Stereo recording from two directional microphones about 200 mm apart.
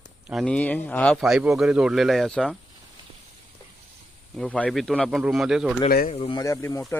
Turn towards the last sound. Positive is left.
turn(degrees=15)  # may be behind; listen again after turning